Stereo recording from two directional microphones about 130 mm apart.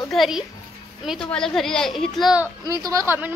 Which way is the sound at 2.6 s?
25° right (ahead or behind).